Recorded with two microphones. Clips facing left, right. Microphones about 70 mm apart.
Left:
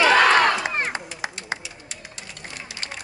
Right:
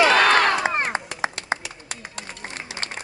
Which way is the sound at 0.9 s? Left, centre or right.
Right.